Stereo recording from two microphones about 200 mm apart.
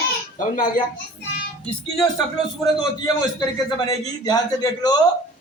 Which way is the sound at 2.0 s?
Centre (ahead or behind).